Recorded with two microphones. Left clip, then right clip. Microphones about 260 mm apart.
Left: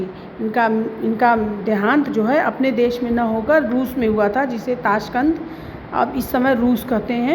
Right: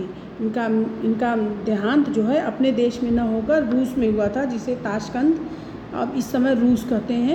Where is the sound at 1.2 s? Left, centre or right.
Centre.